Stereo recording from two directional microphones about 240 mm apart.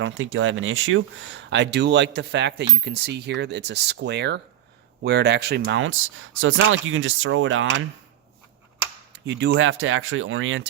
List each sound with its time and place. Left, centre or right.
0.0 s speech: right
9.1 s speech: right